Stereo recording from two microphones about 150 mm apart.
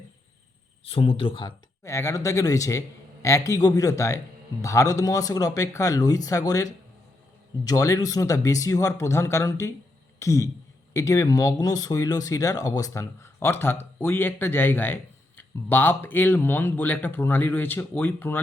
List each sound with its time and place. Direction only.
0.9 s speech: 40° left (ahead or behind)
1.8 s speech: 20° left (ahead or behind)